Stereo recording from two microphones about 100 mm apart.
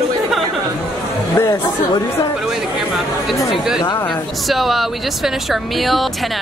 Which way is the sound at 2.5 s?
5° right (ahead or behind).